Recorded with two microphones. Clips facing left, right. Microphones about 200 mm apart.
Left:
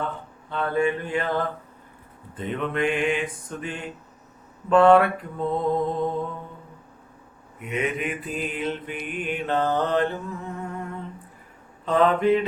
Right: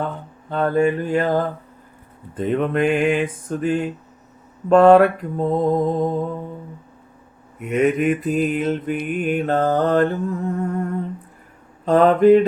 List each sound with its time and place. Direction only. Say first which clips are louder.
0.5 s mantra: right 6 dB; 40° right (ahead or behind)
7.6 s mantra: right 9 dB; 45° right (ahead or behind)